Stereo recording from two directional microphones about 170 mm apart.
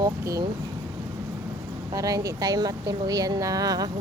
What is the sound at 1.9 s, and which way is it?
Speech, 20° right (ahead or behind).